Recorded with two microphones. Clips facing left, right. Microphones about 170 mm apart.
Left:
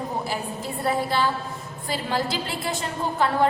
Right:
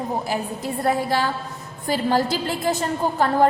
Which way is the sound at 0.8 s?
45° right (ahead or behind).